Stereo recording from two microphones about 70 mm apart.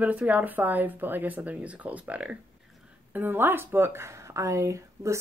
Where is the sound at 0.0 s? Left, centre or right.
Right.